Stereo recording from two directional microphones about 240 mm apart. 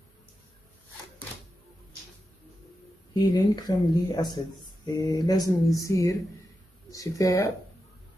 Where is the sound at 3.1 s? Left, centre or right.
Centre.